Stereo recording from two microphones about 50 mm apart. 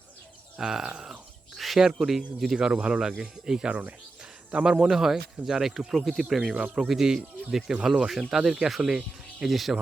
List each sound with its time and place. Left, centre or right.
0.6 s speech: centre; by 3.9 s right
4.6 s speech: centre
6.5 s speech: centre